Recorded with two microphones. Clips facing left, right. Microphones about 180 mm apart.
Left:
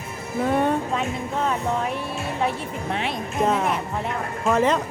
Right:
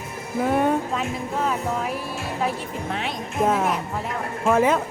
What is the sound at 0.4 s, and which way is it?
Speech, 5° right (ahead or behind).